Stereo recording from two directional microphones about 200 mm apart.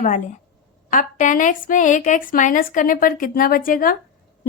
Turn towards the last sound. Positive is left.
turn(degrees=45)  # may be behind; listen again after turning